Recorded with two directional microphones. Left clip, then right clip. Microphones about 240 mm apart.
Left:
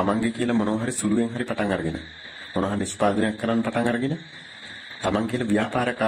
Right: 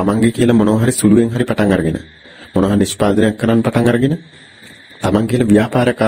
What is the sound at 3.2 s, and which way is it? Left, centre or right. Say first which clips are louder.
Speech: right 10 dB; right.